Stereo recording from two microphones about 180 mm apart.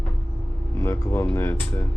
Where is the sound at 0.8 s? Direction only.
15° left (ahead or behind).